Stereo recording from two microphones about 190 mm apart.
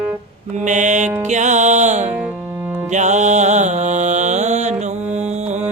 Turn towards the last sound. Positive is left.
turn(degrees=-35)  # may be behind; listen again after turning